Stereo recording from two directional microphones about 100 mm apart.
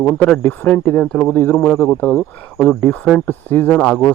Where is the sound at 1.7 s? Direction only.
15° left (ahead or behind).